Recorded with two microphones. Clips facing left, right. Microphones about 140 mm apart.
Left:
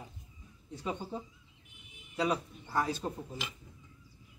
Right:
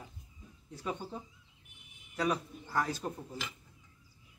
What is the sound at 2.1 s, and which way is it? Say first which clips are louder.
A man's voice: left 1 dB; 15° left (ahead or behind).